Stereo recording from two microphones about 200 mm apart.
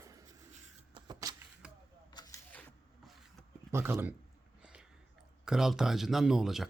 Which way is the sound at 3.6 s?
10° right (ahead or behind).